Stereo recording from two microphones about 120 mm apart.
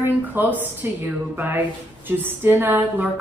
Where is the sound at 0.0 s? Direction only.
15° right (ahead or behind).